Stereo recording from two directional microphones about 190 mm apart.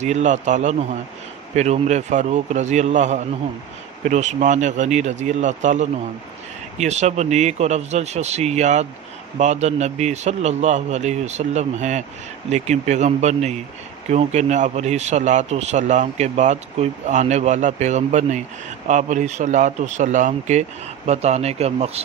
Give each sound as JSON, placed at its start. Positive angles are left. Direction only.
{"t": 0.0, "sound": "a man's voice", "side_deg": -35}